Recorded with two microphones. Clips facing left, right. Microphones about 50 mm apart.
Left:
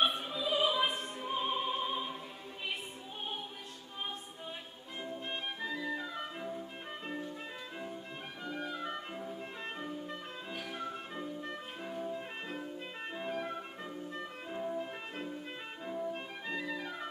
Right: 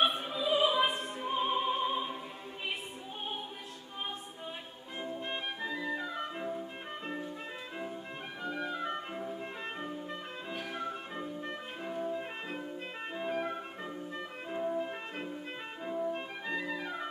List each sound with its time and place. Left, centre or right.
0.0 s opera: centre
5.0 s music: centre
8.5 s music: centre